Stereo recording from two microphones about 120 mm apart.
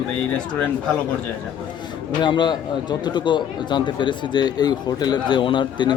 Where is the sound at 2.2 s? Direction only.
40° left (ahead or behind).